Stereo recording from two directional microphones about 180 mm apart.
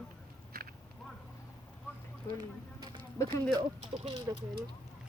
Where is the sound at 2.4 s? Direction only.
25° right (ahead or behind).